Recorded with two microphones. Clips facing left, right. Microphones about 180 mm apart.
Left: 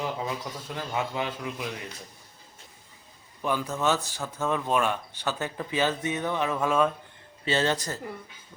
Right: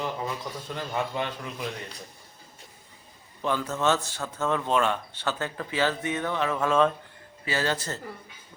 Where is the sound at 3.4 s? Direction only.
10° left (ahead or behind).